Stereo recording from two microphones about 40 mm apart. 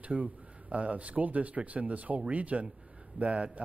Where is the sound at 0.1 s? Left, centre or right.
Right.